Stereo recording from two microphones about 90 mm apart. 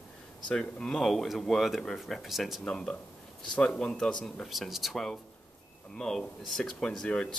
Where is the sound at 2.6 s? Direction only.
10° left (ahead or behind).